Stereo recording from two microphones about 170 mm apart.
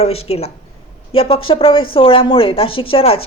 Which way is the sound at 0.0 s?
35° left (ahead or behind).